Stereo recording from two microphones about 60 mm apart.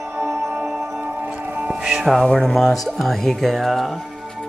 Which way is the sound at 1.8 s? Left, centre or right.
Centre.